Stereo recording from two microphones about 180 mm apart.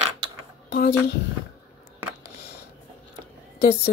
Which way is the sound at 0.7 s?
65° left (ahead or behind).